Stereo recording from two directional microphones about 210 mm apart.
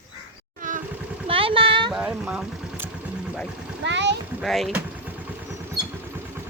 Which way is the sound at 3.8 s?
55° right (ahead or behind).